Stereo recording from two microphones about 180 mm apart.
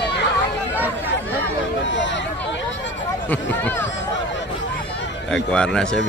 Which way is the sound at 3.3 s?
10° left (ahead or behind).